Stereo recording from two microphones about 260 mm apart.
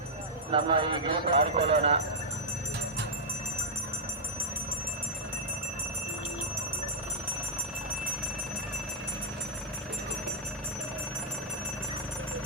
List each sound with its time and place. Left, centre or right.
0.5 s speech: centre